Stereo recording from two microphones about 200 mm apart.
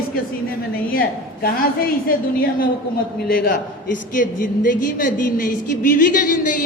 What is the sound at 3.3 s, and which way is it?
A man's voice, 45° left (ahead or behind).